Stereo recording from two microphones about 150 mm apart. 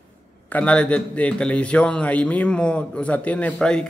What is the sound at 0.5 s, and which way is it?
A man's voice, 10° left (ahead or behind).